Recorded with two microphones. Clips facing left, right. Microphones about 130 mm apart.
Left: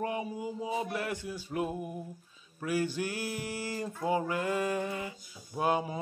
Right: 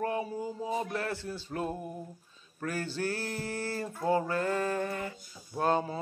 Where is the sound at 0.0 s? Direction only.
15° left (ahead or behind).